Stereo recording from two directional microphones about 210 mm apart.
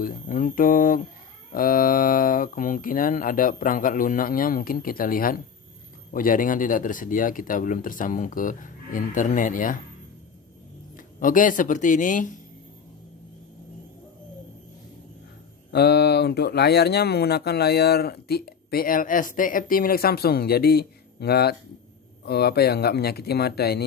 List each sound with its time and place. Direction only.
0.0 s speech: 40° left (ahead or behind)
11.0 s speech: 40° left (ahead or behind)
15.7 s speech: 50° left (ahead or behind)